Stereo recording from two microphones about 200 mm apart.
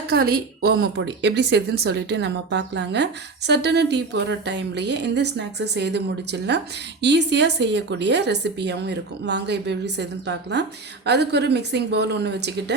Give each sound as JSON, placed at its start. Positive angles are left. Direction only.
{"t": 0.1, "sound": "a woman's voice", "side_deg": -50}